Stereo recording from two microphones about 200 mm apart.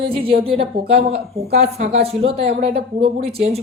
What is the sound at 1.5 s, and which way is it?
A woman's voice, 35° right (ahead or behind).